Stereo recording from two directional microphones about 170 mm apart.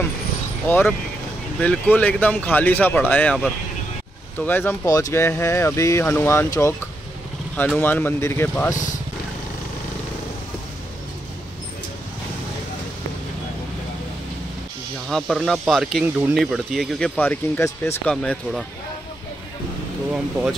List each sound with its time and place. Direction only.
0.7 s speech: 10° left (ahead or behind)
15.0 s speech: centre (ahead or behind)
17.2 s speech: 15° left (ahead or behind)
18.0 s speech: 5° left (ahead or behind)